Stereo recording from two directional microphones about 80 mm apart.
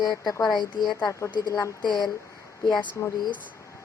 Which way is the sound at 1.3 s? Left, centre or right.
Left.